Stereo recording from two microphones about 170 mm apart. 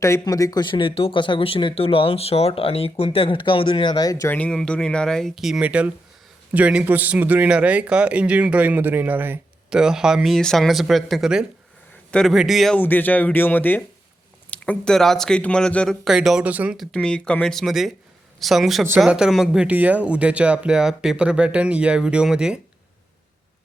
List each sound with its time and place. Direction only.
0.0 s speech: 20° left (ahead or behind)
4.4 s a man's voice: 5° left (ahead or behind)